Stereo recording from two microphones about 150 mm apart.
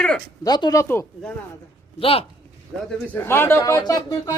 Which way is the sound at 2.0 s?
40° left (ahead or behind).